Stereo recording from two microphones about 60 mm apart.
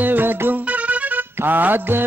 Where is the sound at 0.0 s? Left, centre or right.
Right.